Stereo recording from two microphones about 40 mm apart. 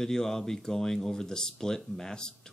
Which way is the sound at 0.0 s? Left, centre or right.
Centre.